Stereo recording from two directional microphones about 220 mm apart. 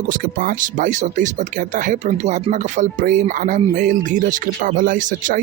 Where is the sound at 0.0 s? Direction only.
40° right (ahead or behind).